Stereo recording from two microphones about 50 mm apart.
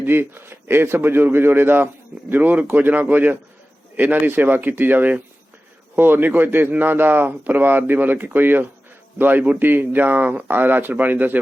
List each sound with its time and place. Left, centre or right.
0.0 s a man's voice: right